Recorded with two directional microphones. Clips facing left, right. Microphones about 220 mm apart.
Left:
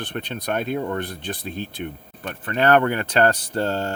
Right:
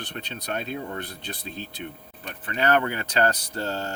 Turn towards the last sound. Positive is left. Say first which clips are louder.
# left 6 dB
turn(degrees=55)  # may be behind; listen again after turning